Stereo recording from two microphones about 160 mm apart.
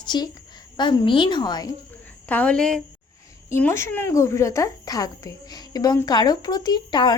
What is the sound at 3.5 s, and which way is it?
A woman's voice, 15° left (ahead or behind).